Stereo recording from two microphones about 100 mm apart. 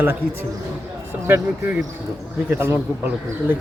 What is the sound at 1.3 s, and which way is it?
Speech, 20° right (ahead or behind).